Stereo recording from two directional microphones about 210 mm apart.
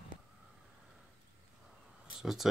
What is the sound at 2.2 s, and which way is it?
Speech, centre (ahead or behind).